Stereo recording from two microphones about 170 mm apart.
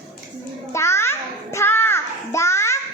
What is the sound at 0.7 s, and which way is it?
Child singing, 15° left (ahead or behind).